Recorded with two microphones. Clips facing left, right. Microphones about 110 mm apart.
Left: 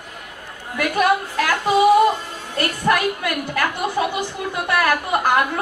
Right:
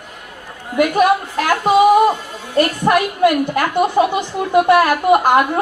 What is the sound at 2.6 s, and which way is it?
A woman's voice, 25° right (ahead or behind).